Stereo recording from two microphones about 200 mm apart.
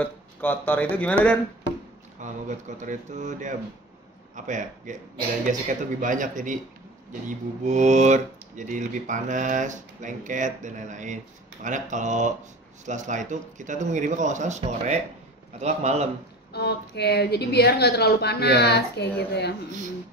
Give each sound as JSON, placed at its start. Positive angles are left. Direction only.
{"t": 0.0, "sound": "speech", "side_deg": 10}
{"t": 2.1, "sound": "speech", "side_deg": -40}
{"t": 15.6, "sound": "speech", "side_deg": -35}
{"t": 16.5, "sound": "a woman's voice", "side_deg": 55}